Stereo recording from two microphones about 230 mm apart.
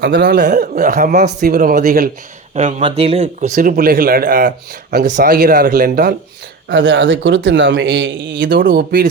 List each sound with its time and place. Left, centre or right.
0.0 s a man's voice: right
0.4 s speech: right
2.6 s speech: right
6.7 s a man's voice: right
8.6 s speech: right